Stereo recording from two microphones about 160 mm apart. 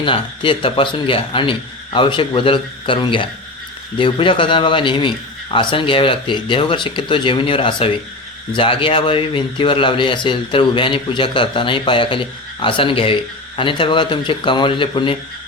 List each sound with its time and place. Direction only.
0.0 s a man's voice: 35° left (ahead or behind)